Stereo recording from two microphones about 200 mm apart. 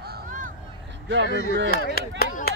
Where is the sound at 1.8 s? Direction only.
50° left (ahead or behind).